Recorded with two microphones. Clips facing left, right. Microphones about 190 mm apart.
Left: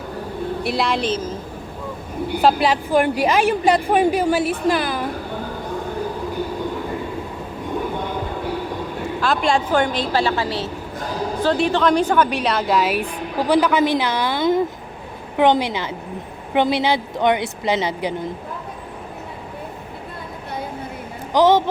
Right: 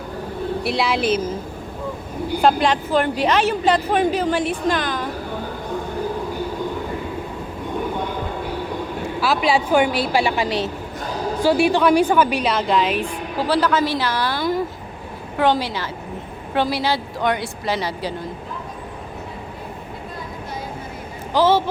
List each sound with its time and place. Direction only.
0.6 s a woman's voice: centre (ahead or behind)
2.4 s a woman's voice: 5° left (ahead or behind)
9.2 s a woman's voice: 5° right (ahead or behind); by 18.1 s 20° left (ahead or behind)
21.3 s a woman's voice: 15° left (ahead or behind)